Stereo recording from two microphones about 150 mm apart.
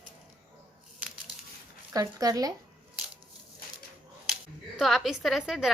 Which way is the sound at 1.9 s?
25° right (ahead or behind).